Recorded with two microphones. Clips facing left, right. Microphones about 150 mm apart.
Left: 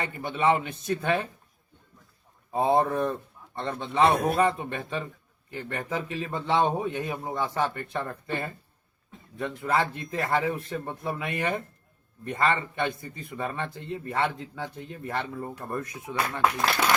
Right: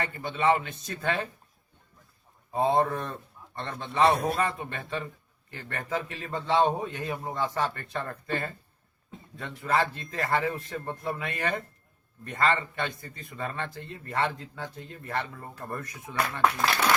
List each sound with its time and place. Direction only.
0.0 s a man's voice: 20° left (ahead or behind)
2.5 s a man's voice: 20° left (ahead or behind)
9.7 s a man's voice: 20° left (ahead or behind)